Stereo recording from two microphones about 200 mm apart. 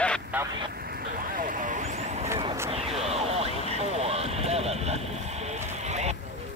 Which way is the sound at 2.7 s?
30° right (ahead or behind).